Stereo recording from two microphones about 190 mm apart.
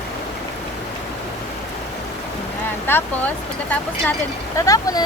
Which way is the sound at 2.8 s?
10° left (ahead or behind).